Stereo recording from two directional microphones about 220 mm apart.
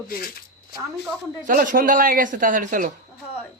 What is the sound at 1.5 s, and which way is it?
Speech, 40° right (ahead or behind).